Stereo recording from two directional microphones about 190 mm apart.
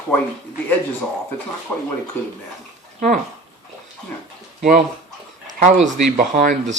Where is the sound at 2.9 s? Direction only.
45° right (ahead or behind).